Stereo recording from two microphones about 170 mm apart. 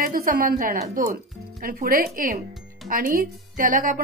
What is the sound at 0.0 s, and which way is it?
A woman's voice, 60° right (ahead or behind).